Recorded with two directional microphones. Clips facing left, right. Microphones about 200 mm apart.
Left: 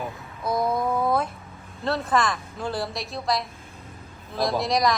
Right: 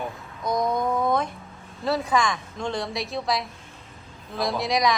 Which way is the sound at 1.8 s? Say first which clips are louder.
Even; centre (ahead or behind).